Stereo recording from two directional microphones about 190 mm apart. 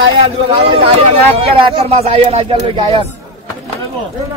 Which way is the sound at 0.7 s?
30° right (ahead or behind).